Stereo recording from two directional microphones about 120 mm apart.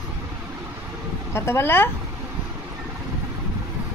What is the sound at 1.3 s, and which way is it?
Speech, 20° left (ahead or behind).